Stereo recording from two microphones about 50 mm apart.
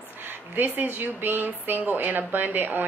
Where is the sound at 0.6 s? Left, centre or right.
Right.